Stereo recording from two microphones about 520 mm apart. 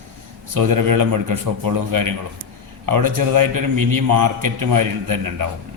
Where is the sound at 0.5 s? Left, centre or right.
Right.